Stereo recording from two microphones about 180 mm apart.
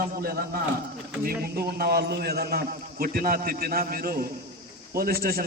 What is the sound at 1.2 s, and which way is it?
A man's voice, 55° right (ahead or behind).